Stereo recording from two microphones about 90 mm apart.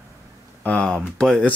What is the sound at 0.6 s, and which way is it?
Speech, 15° left (ahead or behind).